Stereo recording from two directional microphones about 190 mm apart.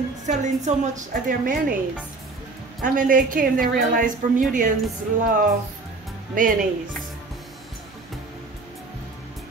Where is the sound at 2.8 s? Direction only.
45° right (ahead or behind).